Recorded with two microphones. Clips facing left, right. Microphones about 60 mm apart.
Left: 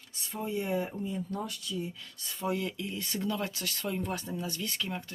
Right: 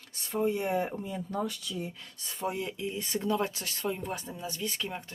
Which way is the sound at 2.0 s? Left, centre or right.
Right.